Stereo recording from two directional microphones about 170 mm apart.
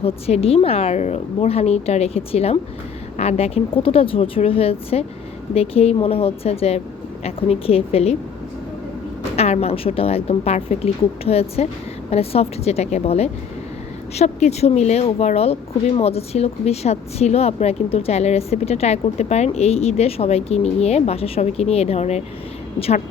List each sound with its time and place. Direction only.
0.0 s a woman's voice: 35° left (ahead or behind)
9.3 s a woman's voice: 35° left (ahead or behind)